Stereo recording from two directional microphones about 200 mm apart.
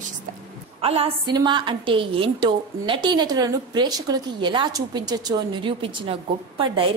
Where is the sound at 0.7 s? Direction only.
30° right (ahead or behind).